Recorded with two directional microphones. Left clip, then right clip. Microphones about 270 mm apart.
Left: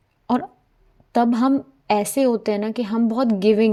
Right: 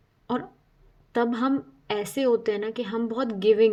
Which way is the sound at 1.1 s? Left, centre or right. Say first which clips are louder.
Left 6 dB; left.